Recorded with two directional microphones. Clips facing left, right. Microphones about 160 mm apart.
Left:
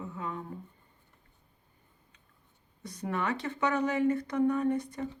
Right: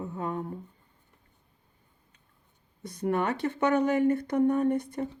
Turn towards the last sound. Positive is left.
turn(degrees=-55)  # may be behind; listen again after turning